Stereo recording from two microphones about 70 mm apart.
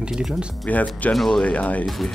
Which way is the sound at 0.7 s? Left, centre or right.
Left.